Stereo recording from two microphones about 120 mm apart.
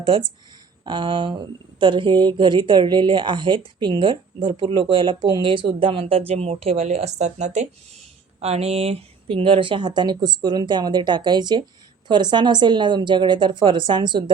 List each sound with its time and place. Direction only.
0.9 s a woman's voice: 40° right (ahead or behind); by 7.7 s 75° right (ahead or behind)
8.4 s a woman's voice: 60° right (ahead or behind); by 14.3 s 40° right (ahead or behind)